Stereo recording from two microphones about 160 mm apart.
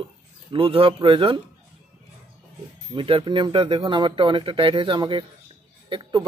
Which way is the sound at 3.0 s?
30° right (ahead or behind).